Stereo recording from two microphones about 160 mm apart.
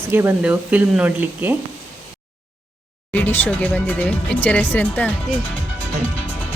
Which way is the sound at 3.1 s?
10° left (ahead or behind).